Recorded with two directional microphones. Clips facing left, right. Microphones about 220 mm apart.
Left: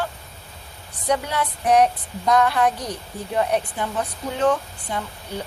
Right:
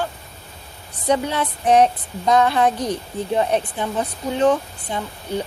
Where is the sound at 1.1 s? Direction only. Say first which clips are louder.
Right 3 dB; 25° right (ahead or behind).